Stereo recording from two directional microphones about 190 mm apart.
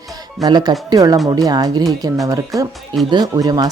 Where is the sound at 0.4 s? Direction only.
20° right (ahead or behind).